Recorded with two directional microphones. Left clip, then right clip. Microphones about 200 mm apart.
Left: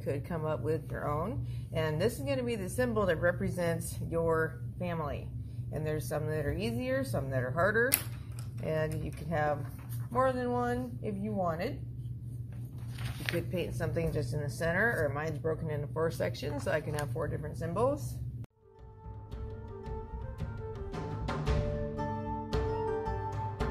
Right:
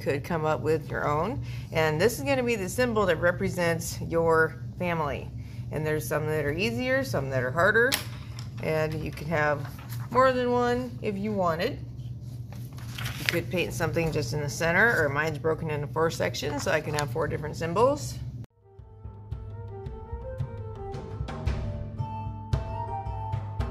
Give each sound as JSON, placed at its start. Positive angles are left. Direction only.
{"t": 0.0, "sound": "speech", "side_deg": -25}
{"t": 12.9, "sound": "speech", "side_deg": -15}